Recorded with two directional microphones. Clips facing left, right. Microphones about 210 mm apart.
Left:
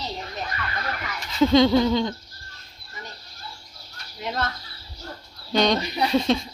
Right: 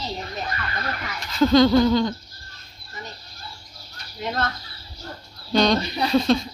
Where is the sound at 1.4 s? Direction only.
20° left (ahead or behind).